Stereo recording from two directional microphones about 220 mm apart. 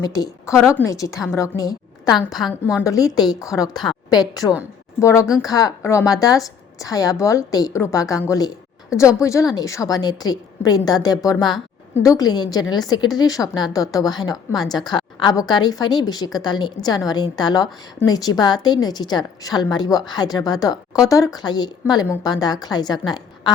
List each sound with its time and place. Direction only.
0.0 s a woman's voice: 15° left (ahead or behind)
2.1 s a woman's voice: centre (ahead or behind)
2.8 s a woman's voice: 15° left (ahead or behind)